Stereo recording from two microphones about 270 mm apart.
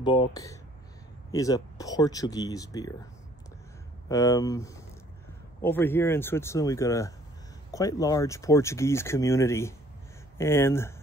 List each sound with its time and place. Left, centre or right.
0.0 s speech: centre
4.1 s speech: centre